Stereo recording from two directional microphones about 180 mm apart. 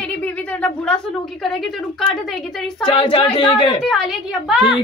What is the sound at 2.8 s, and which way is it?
A man's voice, 25° left (ahead or behind).